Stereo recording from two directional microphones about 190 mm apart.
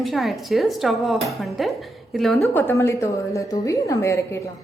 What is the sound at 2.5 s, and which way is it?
A woman's voice, 15° left (ahead or behind).